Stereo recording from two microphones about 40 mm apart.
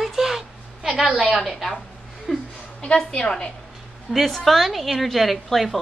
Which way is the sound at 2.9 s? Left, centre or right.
Left.